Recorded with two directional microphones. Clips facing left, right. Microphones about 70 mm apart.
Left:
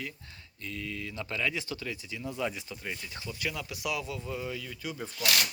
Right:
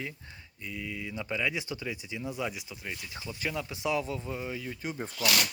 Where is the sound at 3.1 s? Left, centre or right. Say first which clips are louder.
Right 3 dB; right.